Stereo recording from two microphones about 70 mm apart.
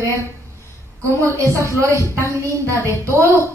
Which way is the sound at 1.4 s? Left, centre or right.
Right.